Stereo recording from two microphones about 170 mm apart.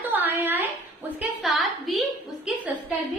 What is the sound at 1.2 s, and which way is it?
Speech, centre (ahead or behind).